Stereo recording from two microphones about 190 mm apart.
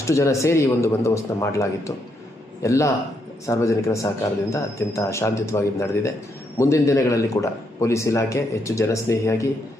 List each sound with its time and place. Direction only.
0.0 s a man's voice: 15° left (ahead or behind)